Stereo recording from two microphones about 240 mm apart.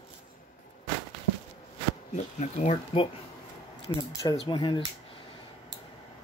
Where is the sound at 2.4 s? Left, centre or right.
Left.